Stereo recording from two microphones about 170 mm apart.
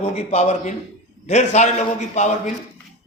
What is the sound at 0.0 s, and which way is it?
A man's voice, 40° left (ahead or behind).